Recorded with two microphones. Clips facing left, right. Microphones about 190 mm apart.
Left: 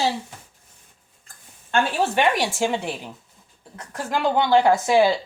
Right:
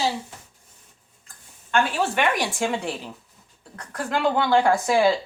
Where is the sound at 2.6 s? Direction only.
20° left (ahead or behind).